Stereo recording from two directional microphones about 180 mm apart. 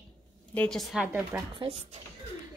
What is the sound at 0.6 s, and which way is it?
Speech, centre (ahead or behind).